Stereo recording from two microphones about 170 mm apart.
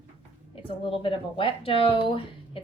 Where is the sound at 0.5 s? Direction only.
30° left (ahead or behind).